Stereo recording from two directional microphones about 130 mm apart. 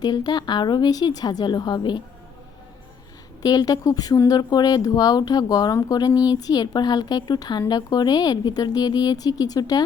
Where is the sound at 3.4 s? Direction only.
30° left (ahead or behind).